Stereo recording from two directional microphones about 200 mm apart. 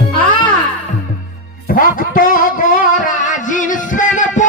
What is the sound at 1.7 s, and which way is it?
Music, 45° left (ahead or behind).